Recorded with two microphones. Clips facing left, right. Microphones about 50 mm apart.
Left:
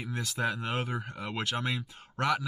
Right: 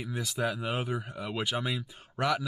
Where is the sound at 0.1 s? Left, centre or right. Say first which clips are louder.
Even; centre.